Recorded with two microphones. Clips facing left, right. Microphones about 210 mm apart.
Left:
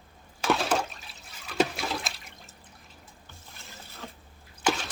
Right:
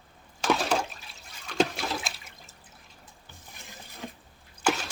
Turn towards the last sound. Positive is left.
turn(degrees=-5)  # may be behind; listen again after turning